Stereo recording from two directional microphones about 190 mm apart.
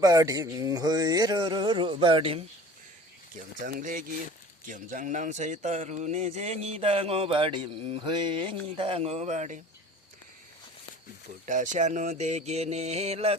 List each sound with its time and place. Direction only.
0.0 s a sound: 20° right (ahead or behind)
3.3 s a man's voice: 45° right (ahead or behind)
11.4 s a man's voice: 40° right (ahead or behind)